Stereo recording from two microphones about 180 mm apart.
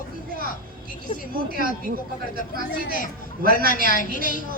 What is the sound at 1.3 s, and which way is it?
Speech, 55° right (ahead or behind).